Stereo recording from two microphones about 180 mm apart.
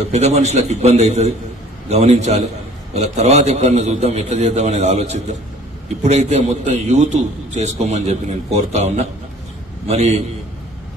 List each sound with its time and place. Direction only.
0.1 s a man's voice: 40° right (ahead or behind)